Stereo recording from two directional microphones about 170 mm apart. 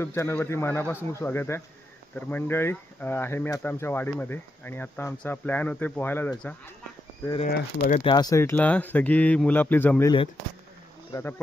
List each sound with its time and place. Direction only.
0.0 s speech: 15° left (ahead or behind)
7.4 s speech: 60° left (ahead or behind)
8.0 s speech: 25° left (ahead or behind)